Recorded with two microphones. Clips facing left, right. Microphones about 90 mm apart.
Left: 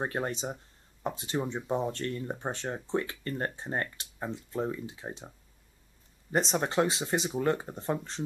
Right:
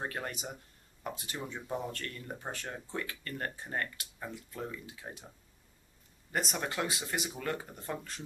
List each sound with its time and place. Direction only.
0.0 s speech: 25° left (ahead or behind)
6.3 s speech: 30° left (ahead or behind)